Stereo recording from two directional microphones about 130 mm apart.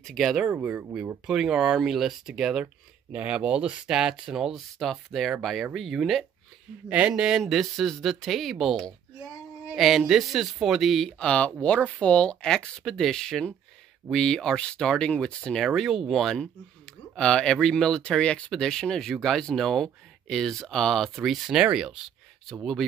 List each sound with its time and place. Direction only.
0.0 s speech: centre (ahead or behind)